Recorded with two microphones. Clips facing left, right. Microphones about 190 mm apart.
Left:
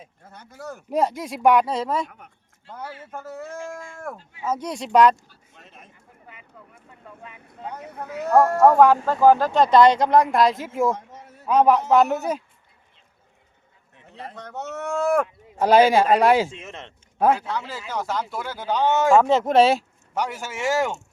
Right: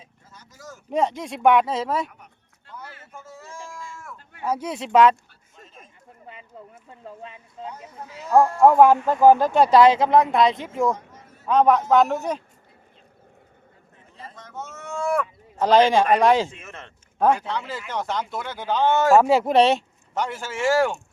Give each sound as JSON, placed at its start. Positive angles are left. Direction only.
{"t": 0.3, "sound": "speech", "side_deg": 60}
{"t": 0.9, "sound": "speech", "side_deg": 0}
{"t": 2.0, "sound": "a sound", "side_deg": 50}
{"t": 4.2, "sound": "a sound", "side_deg": -55}
{"t": 4.4, "sound": "speech", "side_deg": -5}
{"t": 5.5, "sound": "a sound", "side_deg": 65}
{"t": 6.2, "sound": "speech", "side_deg": -25}
{"t": 7.6, "sound": "speech", "side_deg": 60}
{"t": 8.6, "sound": "speech", "side_deg": -15}
{"t": 14.1, "sound": "speech", "side_deg": 65}
{"t": 15.5, "sound": "speech", "side_deg": 10}
{"t": 16.6, "sound": "speech", "side_deg": 20}
{"t": 17.2, "sound": "speech", "side_deg": 5}
{"t": 19.0, "sound": "speech", "side_deg": -10}